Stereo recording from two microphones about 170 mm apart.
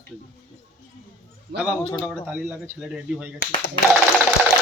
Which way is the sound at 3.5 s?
30° left (ahead or behind).